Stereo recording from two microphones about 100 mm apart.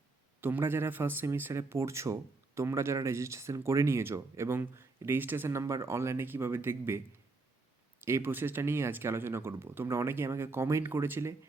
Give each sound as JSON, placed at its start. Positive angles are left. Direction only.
{"t": 0.4, "sound": "speech", "side_deg": -20}
{"t": 8.0, "sound": "speech", "side_deg": -20}